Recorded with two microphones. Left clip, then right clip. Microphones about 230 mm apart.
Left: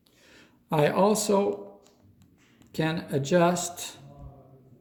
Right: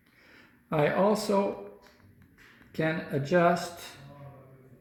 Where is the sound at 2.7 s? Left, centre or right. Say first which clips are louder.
Left 1 dB; left.